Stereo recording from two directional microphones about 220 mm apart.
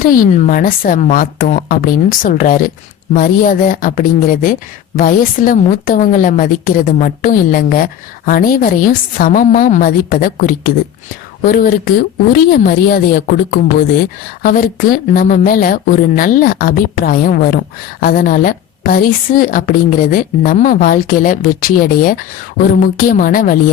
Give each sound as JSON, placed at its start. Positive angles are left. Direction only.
{"t": 0.0, "sound": "a woman's voice", "side_deg": 40}